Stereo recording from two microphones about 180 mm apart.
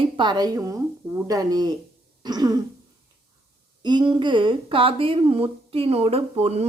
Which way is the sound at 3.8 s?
25° right (ahead or behind).